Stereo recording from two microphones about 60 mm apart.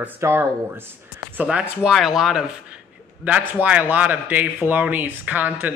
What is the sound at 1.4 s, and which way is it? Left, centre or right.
Speech, centre.